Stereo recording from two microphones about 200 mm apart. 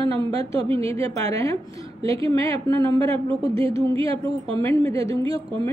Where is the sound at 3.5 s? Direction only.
30° right (ahead or behind).